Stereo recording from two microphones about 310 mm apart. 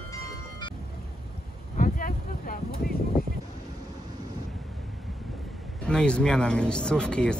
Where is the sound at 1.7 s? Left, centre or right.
Left.